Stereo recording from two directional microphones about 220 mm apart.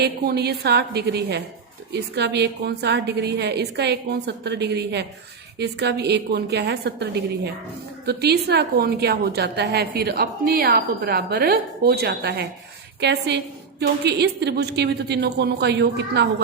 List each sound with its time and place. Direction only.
0.0 s a woman's voice: 45° right (ahead or behind)